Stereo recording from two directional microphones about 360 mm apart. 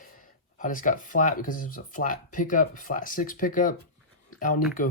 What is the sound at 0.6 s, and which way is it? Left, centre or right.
Speech, left.